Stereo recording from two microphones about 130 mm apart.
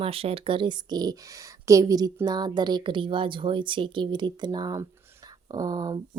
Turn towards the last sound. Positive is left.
turn(degrees=-30)  # may be behind; listen again after turning